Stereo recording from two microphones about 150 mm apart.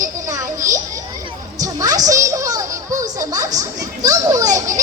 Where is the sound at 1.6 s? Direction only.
25° right (ahead or behind).